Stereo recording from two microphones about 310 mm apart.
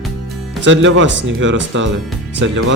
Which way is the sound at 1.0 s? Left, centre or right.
Right.